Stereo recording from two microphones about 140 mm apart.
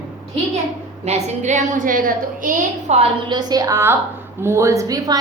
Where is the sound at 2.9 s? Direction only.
55° right (ahead or behind).